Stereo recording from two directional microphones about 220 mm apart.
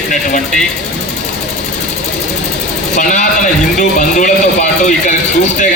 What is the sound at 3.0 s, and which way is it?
A man's voice, 35° left (ahead or behind).